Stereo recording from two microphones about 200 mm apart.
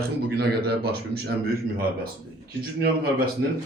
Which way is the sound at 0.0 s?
50° right (ahead or behind).